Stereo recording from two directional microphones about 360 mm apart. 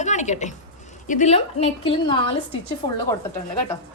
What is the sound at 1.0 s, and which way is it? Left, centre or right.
A woman's voice, centre.